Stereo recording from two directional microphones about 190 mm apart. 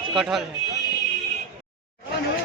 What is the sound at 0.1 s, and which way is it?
Speech, centre (ahead or behind).